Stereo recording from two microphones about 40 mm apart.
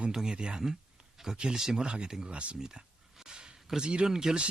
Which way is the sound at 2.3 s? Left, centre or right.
Right.